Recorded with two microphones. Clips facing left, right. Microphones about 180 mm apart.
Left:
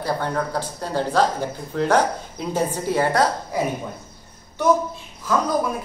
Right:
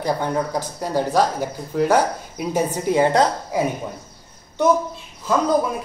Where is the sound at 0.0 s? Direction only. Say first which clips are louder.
Right 2 dB; 15° right (ahead or behind).